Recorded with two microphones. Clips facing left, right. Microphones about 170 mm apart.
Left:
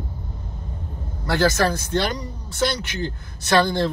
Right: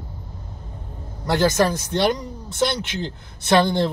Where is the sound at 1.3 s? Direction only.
20° right (ahead or behind).